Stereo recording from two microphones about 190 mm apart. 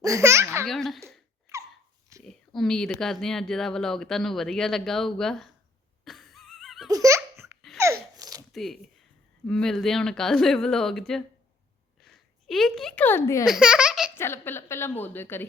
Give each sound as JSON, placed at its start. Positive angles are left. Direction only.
{"t": 0.0, "sound": "speech", "side_deg": -15}
{"t": 0.7, "sound": "speech", "side_deg": 0}
{"t": 2.2, "sound": "speech", "side_deg": 0}
{"t": 6.1, "sound": "a sound", "side_deg": 0}
{"t": 6.9, "sound": "laughter", "side_deg": -15}
{"t": 7.8, "sound": "babbling", "side_deg": -15}
{"t": 8.5, "sound": "speech", "side_deg": 0}
{"t": 13.4, "sound": "speech", "side_deg": -5}
{"t": 14.2, "sound": "a woman's voice", "side_deg": 10}